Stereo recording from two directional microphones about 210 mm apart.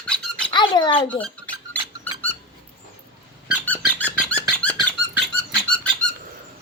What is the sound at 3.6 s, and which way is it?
Squeak, 5° left (ahead or behind).